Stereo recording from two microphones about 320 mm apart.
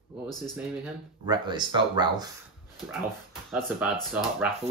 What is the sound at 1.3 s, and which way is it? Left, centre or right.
Speech, centre.